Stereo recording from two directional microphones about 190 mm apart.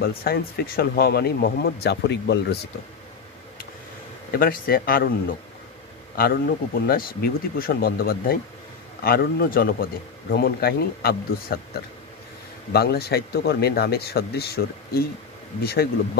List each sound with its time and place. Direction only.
0.0 s speech: 55° left (ahead or behind)
4.3 s speech: 50° left (ahead or behind)
6.1 s speech: 55° left (ahead or behind)
12.7 s speech: 55° left (ahead or behind)